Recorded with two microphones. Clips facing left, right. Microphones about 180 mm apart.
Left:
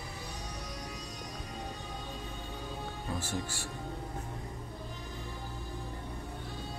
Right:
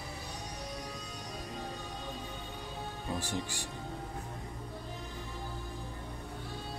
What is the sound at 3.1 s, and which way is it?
Speech, 15° right (ahead or behind).